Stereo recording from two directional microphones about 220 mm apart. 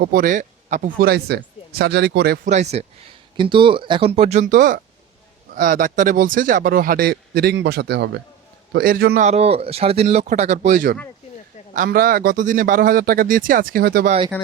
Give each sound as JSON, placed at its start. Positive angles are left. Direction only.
{"t": 0.0, "sound": "a man's voice", "side_deg": -40}
{"t": 14.3, "sound": "speech", "side_deg": 5}